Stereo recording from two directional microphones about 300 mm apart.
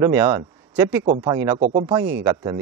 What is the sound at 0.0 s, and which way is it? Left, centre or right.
Speech, centre.